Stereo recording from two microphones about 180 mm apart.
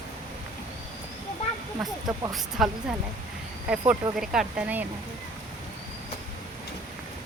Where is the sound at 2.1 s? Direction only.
20° right (ahead or behind).